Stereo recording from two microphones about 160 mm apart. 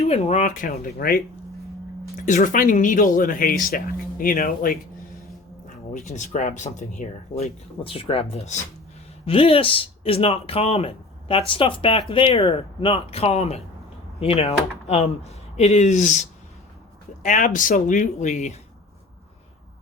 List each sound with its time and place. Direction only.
0.0 s speech: 40° left (ahead or behind); by 1.2 s 70° left (ahead or behind)
2.1 s speech: 50° left (ahead or behind)
5.6 s speech: 50° left (ahead or behind)
17.2 s speech: 55° left (ahead or behind)